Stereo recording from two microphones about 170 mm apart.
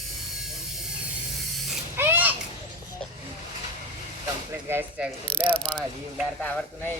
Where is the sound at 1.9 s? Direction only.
15° right (ahead or behind).